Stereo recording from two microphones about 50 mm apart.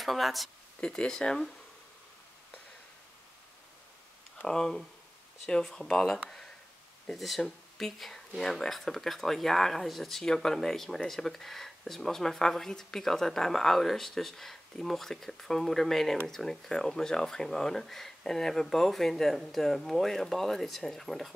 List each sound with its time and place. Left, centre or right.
0.0 s speech: centre
0.7 s speech: centre
4.5 s speech: centre
7.2 s speech: centre